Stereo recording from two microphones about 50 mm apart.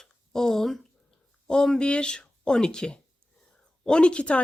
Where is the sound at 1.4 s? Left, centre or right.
Centre.